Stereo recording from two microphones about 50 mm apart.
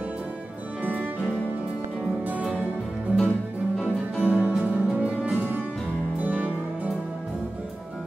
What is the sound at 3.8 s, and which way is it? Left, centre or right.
Music, right.